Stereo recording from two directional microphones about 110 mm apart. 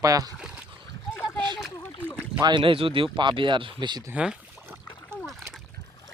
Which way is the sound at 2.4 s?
45° right (ahead or behind).